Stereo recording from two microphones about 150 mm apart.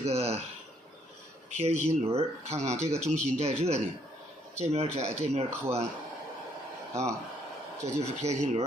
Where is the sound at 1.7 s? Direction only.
45° right (ahead or behind).